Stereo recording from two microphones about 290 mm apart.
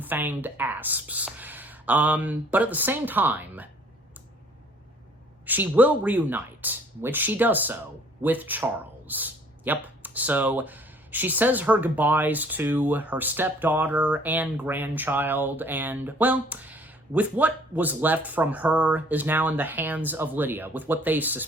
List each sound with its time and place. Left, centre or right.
0.0 s speech: centre
5.5 s speech: centre